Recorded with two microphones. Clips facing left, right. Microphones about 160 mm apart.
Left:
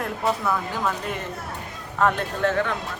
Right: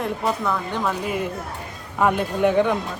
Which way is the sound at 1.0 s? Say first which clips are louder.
Right 5 dB; 5° right (ahead or behind).